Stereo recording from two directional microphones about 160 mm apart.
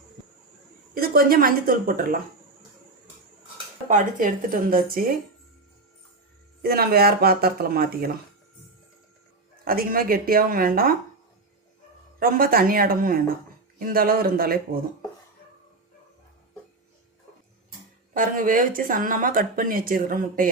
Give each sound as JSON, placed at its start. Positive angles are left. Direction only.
{"t": 0.9, "sound": "speech", "side_deg": -65}
{"t": 3.8, "sound": "speech", "side_deg": -55}
{"t": 6.6, "sound": "speech", "side_deg": -75}
{"t": 9.6, "sound": "speech", "side_deg": -65}
{"t": 12.2, "sound": "speech", "side_deg": -65}
{"t": 17.7, "sound": "speech", "side_deg": -60}